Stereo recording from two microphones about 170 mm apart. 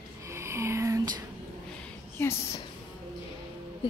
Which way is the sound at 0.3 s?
15° right (ahead or behind).